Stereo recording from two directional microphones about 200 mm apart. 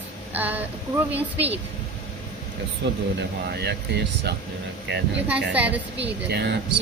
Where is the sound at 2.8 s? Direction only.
60° right (ahead or behind).